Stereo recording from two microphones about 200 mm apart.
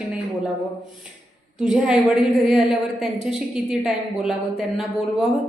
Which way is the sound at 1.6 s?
5° right (ahead or behind).